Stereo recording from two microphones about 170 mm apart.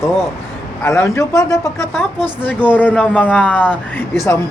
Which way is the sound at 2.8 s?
10° left (ahead or behind).